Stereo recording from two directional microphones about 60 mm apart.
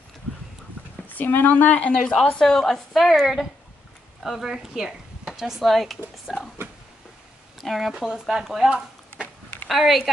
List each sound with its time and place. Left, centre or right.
1.0 s a woman's voice: left
2.1 s a woman's voice: centre
6.3 s speech: centre
7.5 s a sound: centre
8.0 s a woman's voice: centre